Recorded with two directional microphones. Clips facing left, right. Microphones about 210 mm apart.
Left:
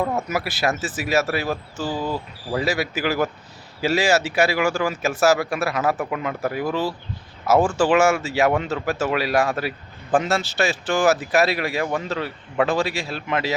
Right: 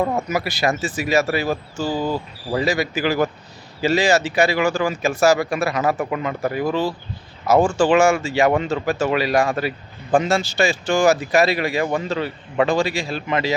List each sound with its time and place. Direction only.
0.3 s speech: 5° left (ahead or behind)
2.0 s speech: 25° right (ahead or behind)
2.6 s speech: 5° left (ahead or behind)